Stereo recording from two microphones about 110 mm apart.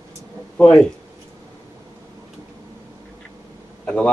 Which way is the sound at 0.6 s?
5° left (ahead or behind).